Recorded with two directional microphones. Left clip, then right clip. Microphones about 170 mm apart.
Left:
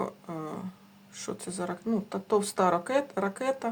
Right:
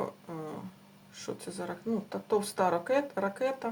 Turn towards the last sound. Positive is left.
turn(degrees=30)  # may be behind; listen again after turning